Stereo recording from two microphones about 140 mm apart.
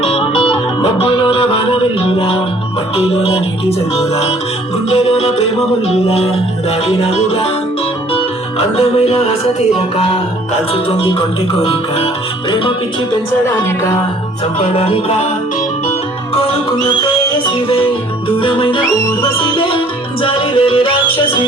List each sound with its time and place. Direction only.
0.0 s music: 45° left (ahead or behind)
10.8 s music: 40° left (ahead or behind)
14.6 s music: 45° left (ahead or behind)
16.3 s music: 45° left (ahead or behind)
18.3 s music: 40° left (ahead or behind)